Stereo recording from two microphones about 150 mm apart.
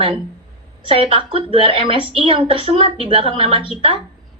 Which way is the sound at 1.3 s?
35° right (ahead or behind).